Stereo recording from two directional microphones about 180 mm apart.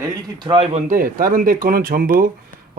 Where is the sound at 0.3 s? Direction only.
25° right (ahead or behind).